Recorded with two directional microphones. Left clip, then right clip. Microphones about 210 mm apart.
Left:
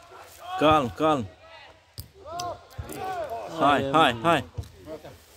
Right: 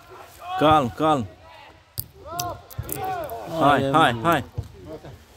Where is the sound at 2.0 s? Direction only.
55° right (ahead or behind).